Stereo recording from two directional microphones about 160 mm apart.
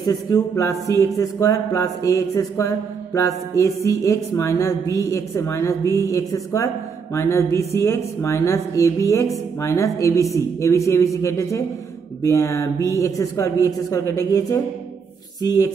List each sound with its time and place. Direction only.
0.0 s speech: 20° left (ahead or behind)